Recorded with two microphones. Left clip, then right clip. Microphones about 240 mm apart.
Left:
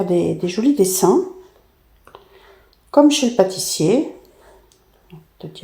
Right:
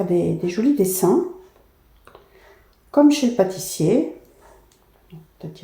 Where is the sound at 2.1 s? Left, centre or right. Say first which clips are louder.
Left 4 dB; centre.